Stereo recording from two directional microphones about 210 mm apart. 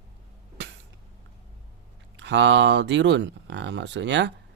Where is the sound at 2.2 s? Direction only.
60° right (ahead or behind).